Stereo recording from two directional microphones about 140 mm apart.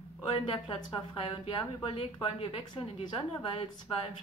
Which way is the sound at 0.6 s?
40° left (ahead or behind).